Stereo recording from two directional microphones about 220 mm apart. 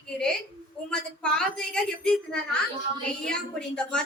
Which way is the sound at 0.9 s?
5° left (ahead or behind).